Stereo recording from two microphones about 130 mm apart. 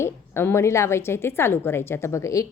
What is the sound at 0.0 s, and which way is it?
A woman's voice, 20° left (ahead or behind).